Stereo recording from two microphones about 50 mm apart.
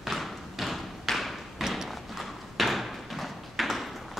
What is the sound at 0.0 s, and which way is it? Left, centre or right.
Thump, centre.